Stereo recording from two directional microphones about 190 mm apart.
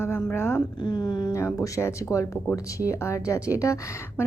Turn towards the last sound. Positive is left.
turn(degrees=15)  # may be behind; listen again after turning